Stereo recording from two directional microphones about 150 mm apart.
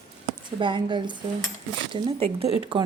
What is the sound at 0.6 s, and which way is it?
A woman's voice, 35° right (ahead or behind).